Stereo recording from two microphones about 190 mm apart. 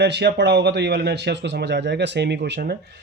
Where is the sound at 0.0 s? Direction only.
60° right (ahead or behind).